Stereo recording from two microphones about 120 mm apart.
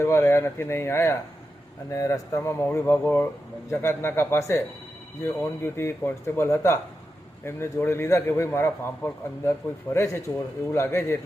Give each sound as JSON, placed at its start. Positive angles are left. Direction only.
{"t": 0.0, "sound": "a man's voice", "side_deg": 25}